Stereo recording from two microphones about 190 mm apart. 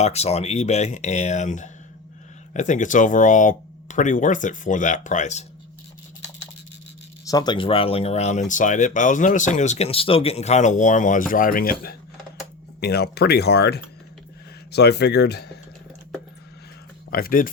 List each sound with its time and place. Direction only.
0.0 s speech: 35° left (ahead or behind)
7.3 s speech: 20° left (ahead or behind); by 15.4 s 60° left (ahead or behind)
17.1 s speech: 50° left (ahead or behind)